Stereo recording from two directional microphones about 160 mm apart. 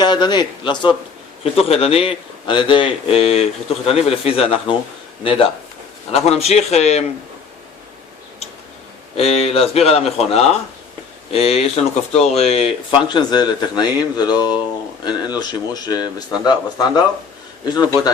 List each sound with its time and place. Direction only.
0.0 s a man's voice: 30° left (ahead or behind)
9.1 s a man's voice: 40° left (ahead or behind)